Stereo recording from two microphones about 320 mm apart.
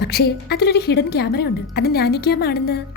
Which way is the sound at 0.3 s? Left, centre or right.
Left.